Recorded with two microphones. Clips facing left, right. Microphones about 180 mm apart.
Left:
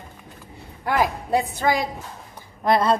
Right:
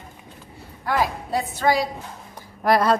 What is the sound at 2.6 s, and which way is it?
Speech, 25° left (ahead or behind).